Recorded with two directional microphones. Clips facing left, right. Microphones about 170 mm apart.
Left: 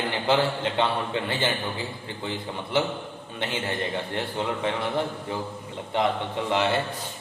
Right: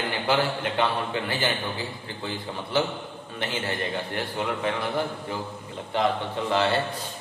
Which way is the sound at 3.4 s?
20° left (ahead or behind).